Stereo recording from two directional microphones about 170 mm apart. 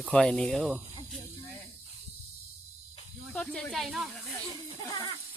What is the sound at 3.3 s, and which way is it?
Speech, 5° left (ahead or behind).